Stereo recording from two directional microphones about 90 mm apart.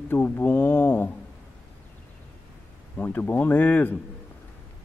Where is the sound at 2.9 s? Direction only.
25° left (ahead or behind).